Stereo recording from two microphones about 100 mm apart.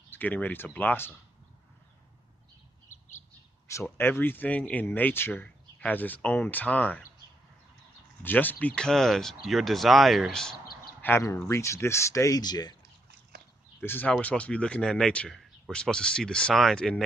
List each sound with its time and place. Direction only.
0.1 s speech: 15° left (ahead or behind)
3.7 s speech: 30° left (ahead or behind)
8.2 s speech: 20° left (ahead or behind)
11.0 s a sound: 20° left (ahead or behind)
11.3 s speech: 25° left (ahead or behind)
12.4 s speech: 45° left (ahead or behind)
13.7 s speech: 20° left (ahead or behind)